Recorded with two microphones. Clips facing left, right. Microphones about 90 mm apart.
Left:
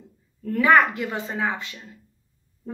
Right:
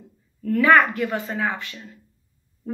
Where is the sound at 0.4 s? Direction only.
20° left (ahead or behind).